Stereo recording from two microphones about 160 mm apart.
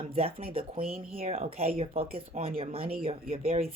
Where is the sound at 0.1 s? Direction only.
40° right (ahead or behind).